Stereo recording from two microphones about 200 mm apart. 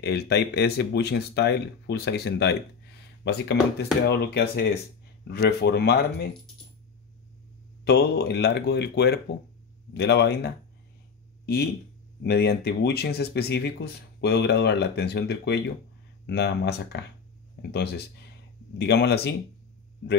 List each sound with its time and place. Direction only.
0.0 s speech: 55° left (ahead or behind)
7.8 s speech: 55° left (ahead or behind)